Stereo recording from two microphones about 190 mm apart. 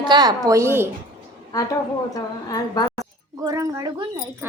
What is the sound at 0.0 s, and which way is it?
Speech, 20° right (ahead or behind).